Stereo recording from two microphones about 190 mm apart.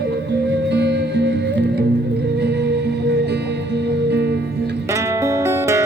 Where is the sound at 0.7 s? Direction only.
60° right (ahead or behind).